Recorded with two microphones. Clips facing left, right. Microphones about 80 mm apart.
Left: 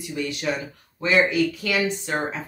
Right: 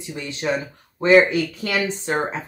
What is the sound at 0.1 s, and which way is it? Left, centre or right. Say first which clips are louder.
Speech: left 1 dB; right.